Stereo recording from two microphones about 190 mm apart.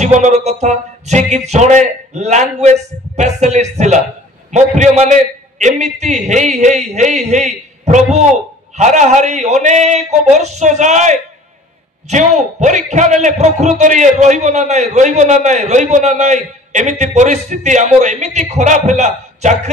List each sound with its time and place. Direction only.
0.0 s a man's voice: 35° right (ahead or behind)